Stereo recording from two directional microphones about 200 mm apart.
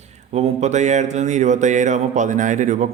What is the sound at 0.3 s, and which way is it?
A man's voice, 35° right (ahead or behind).